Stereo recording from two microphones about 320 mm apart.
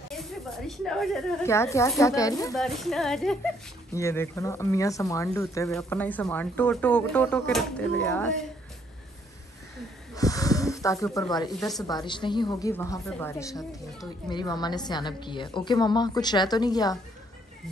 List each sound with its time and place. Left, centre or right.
0.1 s speech: centre
10.1 s snake: centre
12.1 s a woman's voice: centre